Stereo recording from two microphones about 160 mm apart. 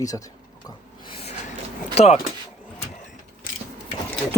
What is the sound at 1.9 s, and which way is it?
Speech, 40° left (ahead or behind).